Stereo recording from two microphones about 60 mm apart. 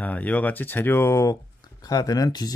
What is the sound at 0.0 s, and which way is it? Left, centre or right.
Speech, left.